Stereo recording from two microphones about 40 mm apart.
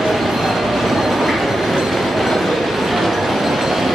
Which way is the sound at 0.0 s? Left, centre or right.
Centre.